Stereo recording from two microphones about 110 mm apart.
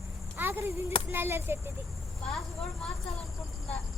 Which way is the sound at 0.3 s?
20° right (ahead or behind).